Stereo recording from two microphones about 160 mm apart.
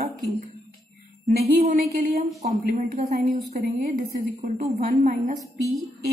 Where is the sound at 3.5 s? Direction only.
70° right (ahead or behind); by 5.4 s 55° right (ahead or behind).